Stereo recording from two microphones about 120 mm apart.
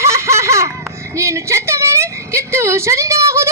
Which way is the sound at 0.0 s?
25° right (ahead or behind).